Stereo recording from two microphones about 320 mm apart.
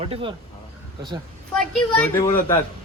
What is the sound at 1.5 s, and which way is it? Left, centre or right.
A child's voice, centre.